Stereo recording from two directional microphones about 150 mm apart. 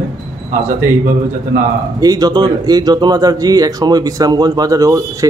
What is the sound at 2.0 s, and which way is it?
Speech, 25° right (ahead or behind).